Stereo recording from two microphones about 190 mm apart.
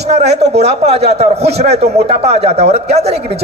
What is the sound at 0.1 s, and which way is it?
A man's voice, 35° right (ahead or behind).